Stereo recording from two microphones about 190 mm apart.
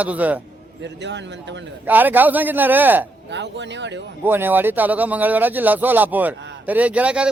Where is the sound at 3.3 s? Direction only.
65° right (ahead or behind).